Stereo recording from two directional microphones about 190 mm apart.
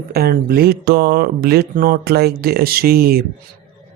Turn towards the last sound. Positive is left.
turn(degrees=-55)  # may be behind; listen again after turning